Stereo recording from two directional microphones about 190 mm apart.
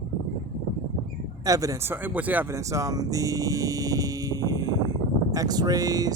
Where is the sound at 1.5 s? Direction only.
20° right (ahead or behind).